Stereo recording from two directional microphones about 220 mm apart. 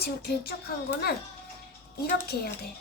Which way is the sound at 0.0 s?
45° left (ahead or behind).